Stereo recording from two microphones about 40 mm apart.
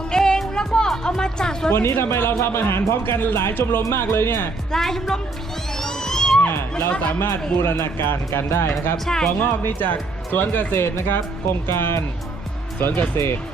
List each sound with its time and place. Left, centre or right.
0.1 s music: centre
0.9 s speech: centre
1.7 s a man's voice: left
4.7 s a woman's voice: centre
5.8 s music: centre
6.5 s a man's voice: left
7.0 s speech: left
7.7 s a man's voice: left
9.0 s a woman's voice: centre
9.4 s speech: left
10.7 s speech: left